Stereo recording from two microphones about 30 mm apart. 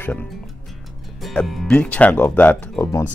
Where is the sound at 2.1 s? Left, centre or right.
Left.